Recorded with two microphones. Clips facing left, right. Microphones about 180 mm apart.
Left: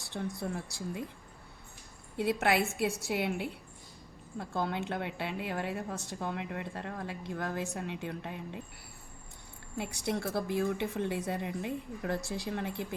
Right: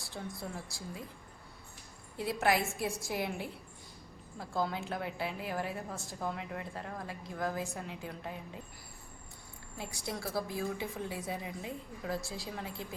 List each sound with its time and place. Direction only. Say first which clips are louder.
0.1 s a woman's voice: left 6 dB; 65° left (ahead or behind)
2.1 s a woman's voice: left 2 dB; 65° left (ahead or behind)
9.7 s a woman's voice: left 6 dB; 65° left (ahead or behind)